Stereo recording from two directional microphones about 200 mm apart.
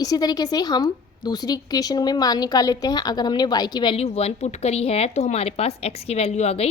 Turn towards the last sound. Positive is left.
turn(degrees=30)  # may be behind; listen again after turning